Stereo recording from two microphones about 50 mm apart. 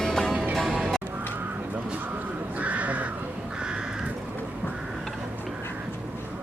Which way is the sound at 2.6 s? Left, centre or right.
Right.